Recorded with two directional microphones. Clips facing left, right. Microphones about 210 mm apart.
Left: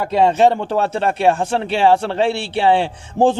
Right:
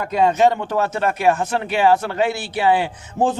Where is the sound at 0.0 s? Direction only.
30° left (ahead or behind).